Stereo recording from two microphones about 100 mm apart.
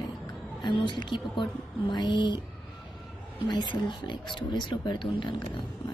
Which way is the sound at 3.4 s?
45° left (ahead or behind).